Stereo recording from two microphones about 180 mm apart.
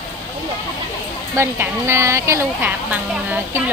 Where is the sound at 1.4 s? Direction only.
15° right (ahead or behind).